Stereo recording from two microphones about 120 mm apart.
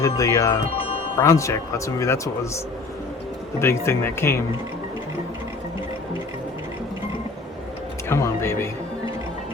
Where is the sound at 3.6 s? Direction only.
20° left (ahead or behind).